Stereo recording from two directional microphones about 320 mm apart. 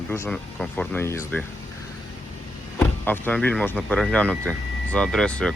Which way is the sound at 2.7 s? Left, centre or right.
Centre.